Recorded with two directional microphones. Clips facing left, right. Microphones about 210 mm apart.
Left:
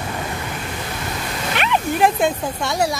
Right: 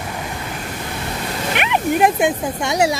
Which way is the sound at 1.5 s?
15° right (ahead or behind).